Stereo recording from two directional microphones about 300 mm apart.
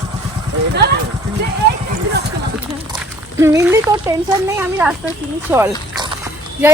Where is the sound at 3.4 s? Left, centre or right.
Centre.